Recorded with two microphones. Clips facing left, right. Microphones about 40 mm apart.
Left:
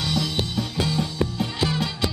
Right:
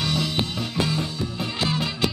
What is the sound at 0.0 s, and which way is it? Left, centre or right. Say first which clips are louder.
Music: even; centre.